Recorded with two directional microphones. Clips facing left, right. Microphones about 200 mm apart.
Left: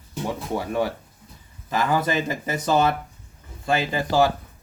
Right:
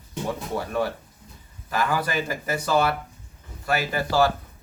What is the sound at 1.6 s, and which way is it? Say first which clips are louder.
Speech: left 3 dB; 20° left (ahead or behind).